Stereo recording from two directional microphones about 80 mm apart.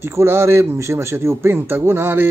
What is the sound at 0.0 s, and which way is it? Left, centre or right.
A man's voice, right.